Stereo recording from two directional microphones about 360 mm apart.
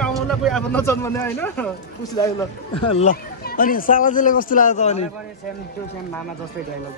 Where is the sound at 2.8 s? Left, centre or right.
Centre.